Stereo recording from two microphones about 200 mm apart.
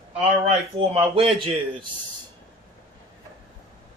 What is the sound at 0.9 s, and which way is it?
Speech, 25° right (ahead or behind).